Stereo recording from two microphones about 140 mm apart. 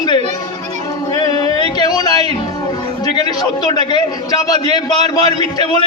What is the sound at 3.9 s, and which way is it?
A man's voice, 30° left (ahead or behind).